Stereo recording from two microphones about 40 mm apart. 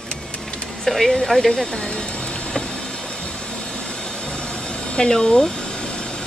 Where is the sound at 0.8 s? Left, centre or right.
Centre.